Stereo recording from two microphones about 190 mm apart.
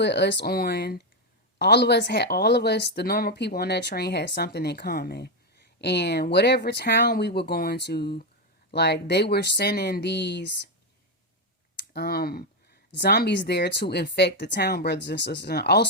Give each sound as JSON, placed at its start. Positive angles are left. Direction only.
{"t": 0.0, "sound": "speech", "side_deg": 65}
{"t": 11.9, "sound": "speech", "side_deg": 55}